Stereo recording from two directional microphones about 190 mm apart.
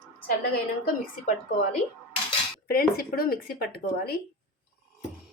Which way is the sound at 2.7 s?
50° left (ahead or behind).